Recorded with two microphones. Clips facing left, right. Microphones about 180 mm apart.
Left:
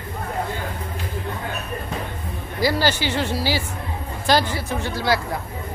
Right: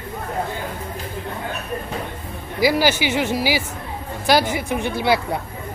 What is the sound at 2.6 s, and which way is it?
Speech, 10° right (ahead or behind).